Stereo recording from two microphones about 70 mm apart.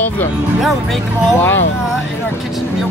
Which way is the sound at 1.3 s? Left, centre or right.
Left.